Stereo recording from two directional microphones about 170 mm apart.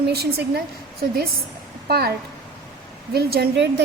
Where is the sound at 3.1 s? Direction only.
70° right (ahead or behind).